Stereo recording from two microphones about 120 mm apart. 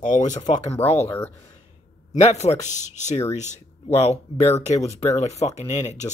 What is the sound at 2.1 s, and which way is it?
Speech, 70° left (ahead or behind).